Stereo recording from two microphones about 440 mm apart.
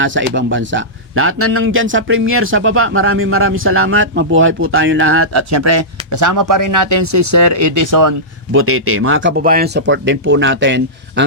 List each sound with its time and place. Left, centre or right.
0.0 s speech: right
8.5 s speech: right